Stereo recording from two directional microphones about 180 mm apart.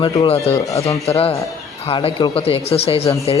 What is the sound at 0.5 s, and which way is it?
Speech, 20° left (ahead or behind).